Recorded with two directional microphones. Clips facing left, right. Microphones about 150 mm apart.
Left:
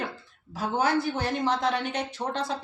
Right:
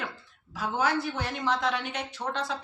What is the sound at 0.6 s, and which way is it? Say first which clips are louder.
A woman's voice: left 2 dB; 35° left (ahead or behind).